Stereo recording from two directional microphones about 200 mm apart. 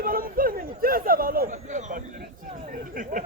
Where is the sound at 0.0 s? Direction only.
45° right (ahead or behind).